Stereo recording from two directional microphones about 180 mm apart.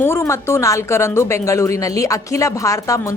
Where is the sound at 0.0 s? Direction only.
15° left (ahead or behind).